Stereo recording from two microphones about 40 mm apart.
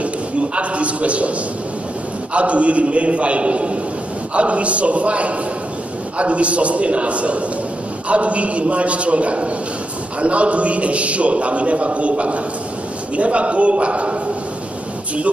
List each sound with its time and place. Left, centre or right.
0.6 s a man's voice: right
2.3 s a man's voice: right